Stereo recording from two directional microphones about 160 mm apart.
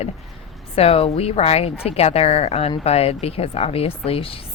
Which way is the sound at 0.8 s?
35° left (ahead or behind).